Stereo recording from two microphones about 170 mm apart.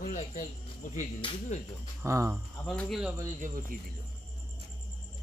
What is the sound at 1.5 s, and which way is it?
Speech, 40° left (ahead or behind).